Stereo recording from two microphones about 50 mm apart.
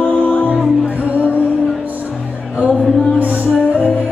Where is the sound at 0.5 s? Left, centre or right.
Right.